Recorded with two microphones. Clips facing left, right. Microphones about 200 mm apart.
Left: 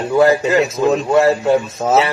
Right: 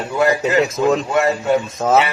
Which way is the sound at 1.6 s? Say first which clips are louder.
Even; 5° left (ahead or behind).